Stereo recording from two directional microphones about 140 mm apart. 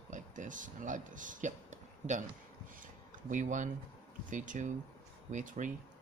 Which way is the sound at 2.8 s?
65° right (ahead or behind).